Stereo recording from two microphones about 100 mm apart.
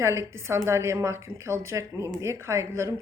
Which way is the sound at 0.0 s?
30° right (ahead or behind).